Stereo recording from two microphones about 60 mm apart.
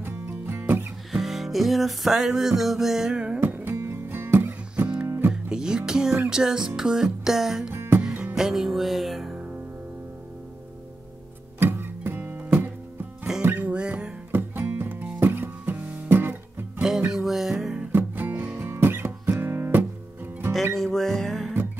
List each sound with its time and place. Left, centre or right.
0.3 s music: right
1.1 s music: centre
3.3 s music: right
5.3 s music: centre
7.7 s music: right
8.4 s music: centre
11.6 s music: right; by 14.1 s centre
14.3 s music: right
15.8 s music: right
16.1 s guitar: right
17.1 s music: centre
17.9 s music: right
20.7 s music: centre